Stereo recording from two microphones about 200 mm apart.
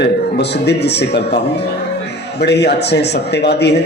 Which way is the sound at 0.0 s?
55° left (ahead or behind).